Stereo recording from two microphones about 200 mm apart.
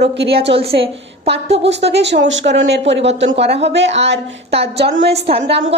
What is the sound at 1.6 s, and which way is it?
Speech, 60° right (ahead or behind).